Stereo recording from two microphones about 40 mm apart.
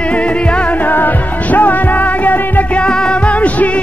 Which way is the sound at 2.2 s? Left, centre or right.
Left.